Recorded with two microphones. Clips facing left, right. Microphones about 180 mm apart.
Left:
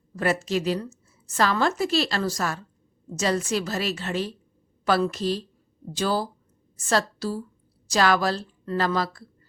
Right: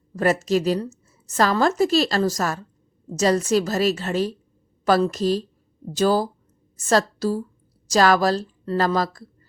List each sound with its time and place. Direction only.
0.2 s a woman's voice: 40° right (ahead or behind)